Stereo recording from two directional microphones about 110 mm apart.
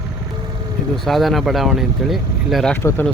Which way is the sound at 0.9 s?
Centre (ahead or behind).